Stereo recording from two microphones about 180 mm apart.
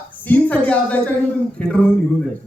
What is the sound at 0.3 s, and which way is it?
Speech, 10° left (ahead or behind).